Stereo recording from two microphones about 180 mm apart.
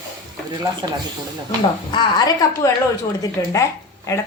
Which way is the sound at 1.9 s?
25° left (ahead or behind).